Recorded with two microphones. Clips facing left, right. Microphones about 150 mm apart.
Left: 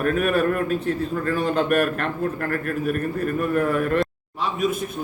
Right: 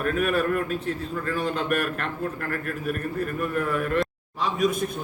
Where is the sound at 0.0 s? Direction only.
50° left (ahead or behind).